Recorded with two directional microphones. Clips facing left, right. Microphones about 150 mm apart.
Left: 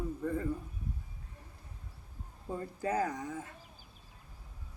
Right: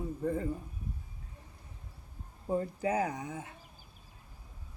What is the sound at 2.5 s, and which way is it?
Speech, 20° right (ahead or behind).